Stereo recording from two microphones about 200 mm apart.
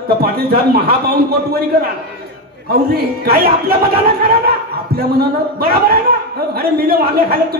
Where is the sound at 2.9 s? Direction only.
50° right (ahead or behind).